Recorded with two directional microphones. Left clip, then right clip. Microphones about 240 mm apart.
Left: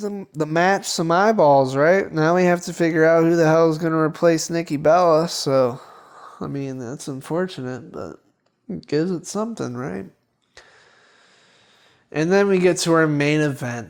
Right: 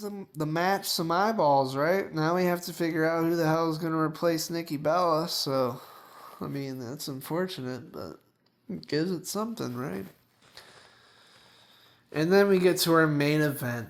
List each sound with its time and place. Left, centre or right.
0.0 s speech: left
12.1 s speech: left